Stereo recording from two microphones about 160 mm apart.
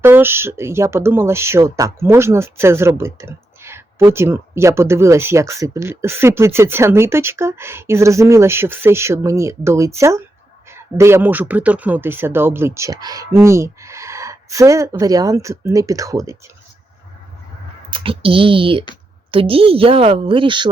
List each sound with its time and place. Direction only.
0.0 s speech: 15° right (ahead or behind)
17.9 s a woman's voice: 35° right (ahead or behind)